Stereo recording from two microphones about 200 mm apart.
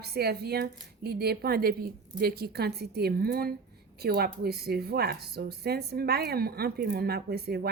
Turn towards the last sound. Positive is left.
turn(degrees=-50)  # may be behind; listen again after turning